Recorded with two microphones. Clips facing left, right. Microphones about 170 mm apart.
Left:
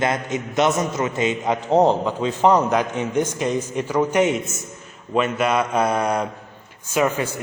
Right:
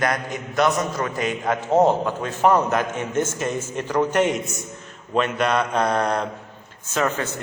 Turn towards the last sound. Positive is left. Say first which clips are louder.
# left 3 dB
turn(degrees=10)  # may be behind; listen again after turning